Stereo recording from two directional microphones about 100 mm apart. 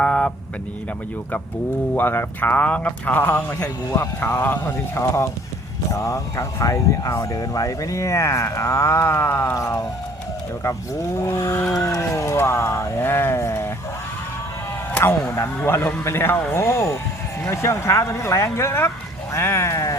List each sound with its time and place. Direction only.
0.0 s vehicle: 10° left (ahead or behind)
2.0 s speech: 20° left (ahead or behind)
11.2 s speech: 30° left (ahead or behind)
15.3 s speech: 25° left (ahead or behind)